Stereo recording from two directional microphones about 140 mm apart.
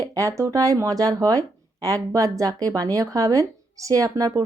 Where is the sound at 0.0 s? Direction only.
25° right (ahead or behind).